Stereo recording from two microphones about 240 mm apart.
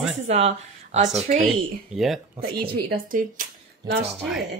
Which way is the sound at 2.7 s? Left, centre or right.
Right.